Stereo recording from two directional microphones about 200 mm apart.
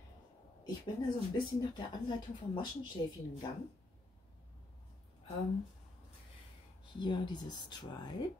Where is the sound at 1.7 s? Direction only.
20° left (ahead or behind).